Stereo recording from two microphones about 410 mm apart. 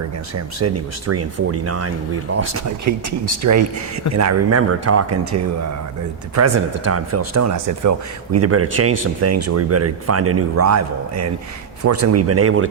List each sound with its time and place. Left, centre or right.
0.3 s speech: right